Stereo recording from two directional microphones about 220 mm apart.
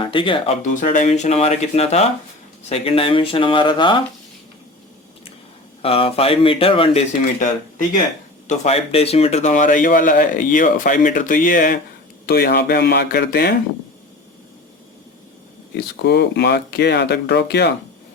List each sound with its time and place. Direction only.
0.0 s speech: 25° left (ahead or behind)
5.8 s speech: 25° left (ahead or behind)
8.4 s speech: 30° left (ahead or behind); by 13.5 s 45° left (ahead or behind)
15.7 s speech: 50° left (ahead or behind)